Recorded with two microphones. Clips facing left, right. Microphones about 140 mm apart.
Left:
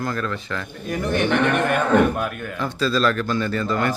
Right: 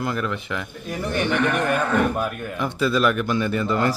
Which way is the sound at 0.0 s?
20° right (ahead or behind).